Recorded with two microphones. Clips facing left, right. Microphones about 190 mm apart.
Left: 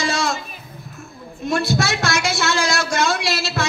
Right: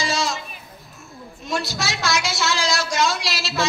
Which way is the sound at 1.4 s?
55° left (ahead or behind).